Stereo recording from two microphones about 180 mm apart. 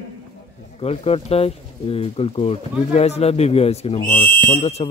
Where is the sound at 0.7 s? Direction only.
35° left (ahead or behind).